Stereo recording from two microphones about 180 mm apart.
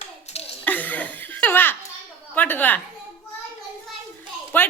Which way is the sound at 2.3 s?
10° left (ahead or behind).